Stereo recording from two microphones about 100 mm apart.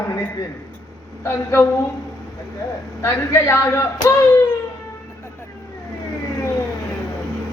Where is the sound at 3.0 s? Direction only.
25° left (ahead or behind).